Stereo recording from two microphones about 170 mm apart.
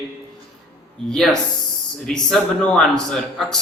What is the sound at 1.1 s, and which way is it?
A man's voice, centre (ahead or behind).